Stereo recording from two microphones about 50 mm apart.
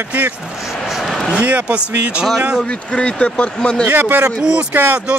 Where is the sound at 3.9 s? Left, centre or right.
Right.